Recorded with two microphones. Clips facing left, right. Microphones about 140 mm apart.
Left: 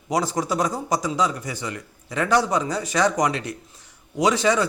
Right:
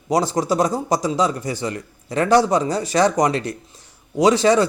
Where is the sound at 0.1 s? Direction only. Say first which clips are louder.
Right 4 dB; 30° right (ahead or behind).